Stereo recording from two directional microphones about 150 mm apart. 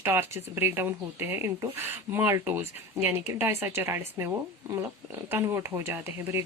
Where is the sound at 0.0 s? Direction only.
15° right (ahead or behind).